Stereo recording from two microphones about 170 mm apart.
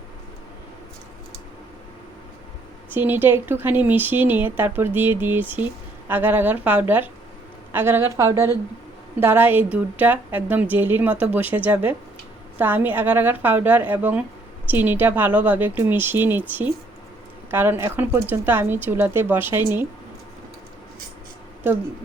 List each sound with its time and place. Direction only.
2.9 s a woman's voice: 15° right (ahead or behind)